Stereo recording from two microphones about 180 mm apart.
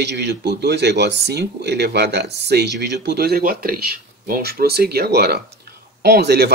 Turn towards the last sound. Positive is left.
turn(degrees=-65)  # may be behind; listen again after turning